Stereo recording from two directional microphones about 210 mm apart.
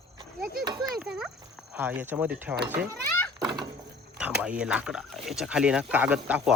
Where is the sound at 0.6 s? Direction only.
20° right (ahead or behind).